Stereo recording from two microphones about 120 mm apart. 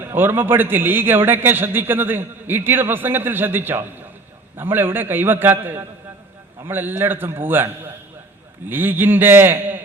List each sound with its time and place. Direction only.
0.0 s a man's voice: 20° right (ahead or behind)